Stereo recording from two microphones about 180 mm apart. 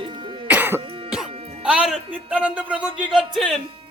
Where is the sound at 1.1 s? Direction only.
5° right (ahead or behind).